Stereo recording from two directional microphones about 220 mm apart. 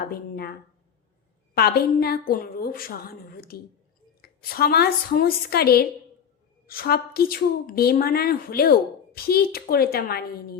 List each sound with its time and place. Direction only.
0.1 s a woman's voice: 45° left (ahead or behind)
1.5 s a woman's voice: 45° left (ahead or behind)